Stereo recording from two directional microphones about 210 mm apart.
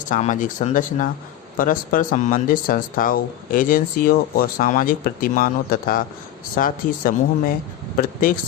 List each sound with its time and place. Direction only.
0.0 s speech: 35° left (ahead or behind)